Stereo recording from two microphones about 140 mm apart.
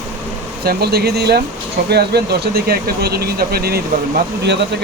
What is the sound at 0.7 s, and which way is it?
Speech, 90° right.